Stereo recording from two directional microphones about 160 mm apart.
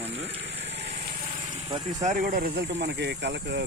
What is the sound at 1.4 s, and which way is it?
Vehicle, 40° right (ahead or behind).